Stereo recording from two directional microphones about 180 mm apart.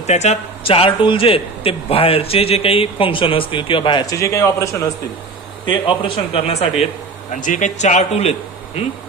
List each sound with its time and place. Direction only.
0.0 s a man's voice: 40° left (ahead or behind); by 4.8 s 15° left (ahead or behind)
5.7 s a man's voice: 30° left (ahead or behind)